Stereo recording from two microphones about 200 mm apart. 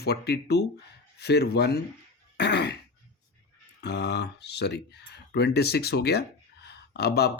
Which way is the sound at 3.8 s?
60° left (ahead or behind).